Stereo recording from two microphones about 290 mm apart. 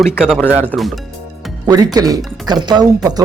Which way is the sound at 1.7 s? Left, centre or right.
Centre.